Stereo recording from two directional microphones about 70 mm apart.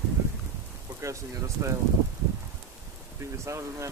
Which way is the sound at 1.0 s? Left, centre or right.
Right.